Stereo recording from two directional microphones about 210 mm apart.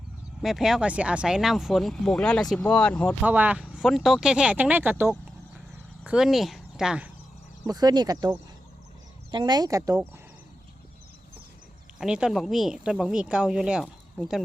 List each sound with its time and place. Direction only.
0.4 s speech: centre (ahead or behind)
3.2 s speech: 5° right (ahead or behind)
7.7 s speech: 20° right (ahead or behind)
9.3 s speech: 20° right (ahead or behind)
11.9 s speech: 5° right (ahead or behind)